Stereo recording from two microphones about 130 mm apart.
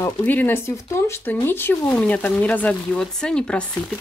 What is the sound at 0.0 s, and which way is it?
Speech, 15° left (ahead or behind).